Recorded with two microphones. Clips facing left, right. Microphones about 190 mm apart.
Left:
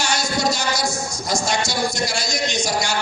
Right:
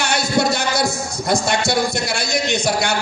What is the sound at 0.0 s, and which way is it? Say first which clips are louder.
A man's voice: right 3 dB; 60° right (ahead or behind).